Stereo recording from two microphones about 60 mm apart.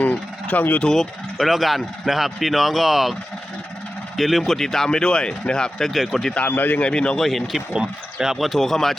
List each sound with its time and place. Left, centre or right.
0.0 s speech: left
1.4 s speech: centre
4.2 s speech: centre
5.9 s speech: centre
6.5 s speech: left
6.8 s speech: centre
7.3 s speech: centre
7.7 s speech: centre